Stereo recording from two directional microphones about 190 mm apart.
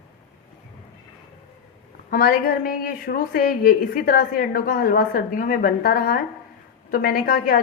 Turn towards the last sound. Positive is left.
turn(degrees=50)  # may be behind; listen again after turning